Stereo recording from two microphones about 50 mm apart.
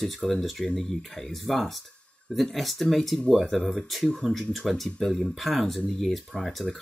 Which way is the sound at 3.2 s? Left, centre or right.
Centre.